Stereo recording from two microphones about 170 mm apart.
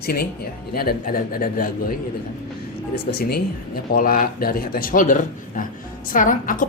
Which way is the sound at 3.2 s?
65° left (ahead or behind).